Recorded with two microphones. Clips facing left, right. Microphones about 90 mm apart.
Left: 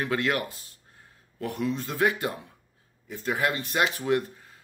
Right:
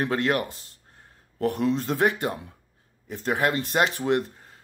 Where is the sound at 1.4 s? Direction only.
55° right (ahead or behind).